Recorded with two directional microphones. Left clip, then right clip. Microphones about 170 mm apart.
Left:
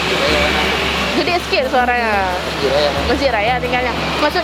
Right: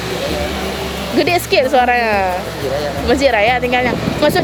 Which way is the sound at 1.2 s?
65° right (ahead or behind).